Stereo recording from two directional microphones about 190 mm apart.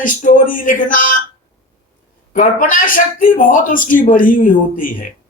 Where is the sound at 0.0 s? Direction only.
45° left (ahead or behind).